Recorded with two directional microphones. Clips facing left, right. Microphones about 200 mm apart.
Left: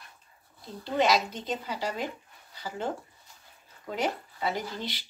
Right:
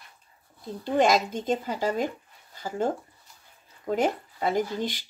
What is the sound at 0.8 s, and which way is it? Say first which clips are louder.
Speech: right 3 dB; 50° right (ahead or behind).